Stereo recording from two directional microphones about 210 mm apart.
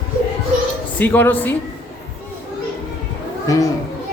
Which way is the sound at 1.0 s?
10° left (ahead or behind).